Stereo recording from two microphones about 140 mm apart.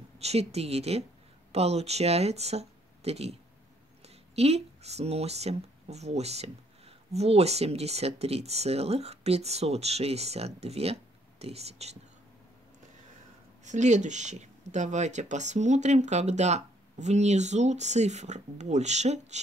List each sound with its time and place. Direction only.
0.2 s speech: 50° right (ahead or behind)
13.7 s speech: 60° right (ahead or behind)